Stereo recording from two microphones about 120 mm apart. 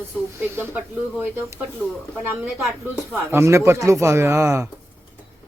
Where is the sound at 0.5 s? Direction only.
20° right (ahead or behind).